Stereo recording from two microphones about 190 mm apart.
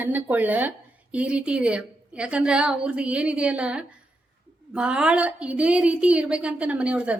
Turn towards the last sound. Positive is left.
turn(degrees=-5)  # may be behind; listen again after turning